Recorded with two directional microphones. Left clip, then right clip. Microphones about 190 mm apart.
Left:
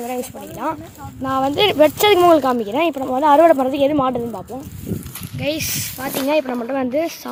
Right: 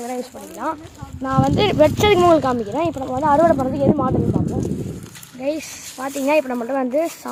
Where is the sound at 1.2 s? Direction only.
Centre (ahead or behind); by 4.1 s 15° left (ahead or behind).